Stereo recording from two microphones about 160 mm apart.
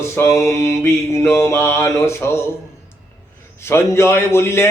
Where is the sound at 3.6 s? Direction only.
15° left (ahead or behind).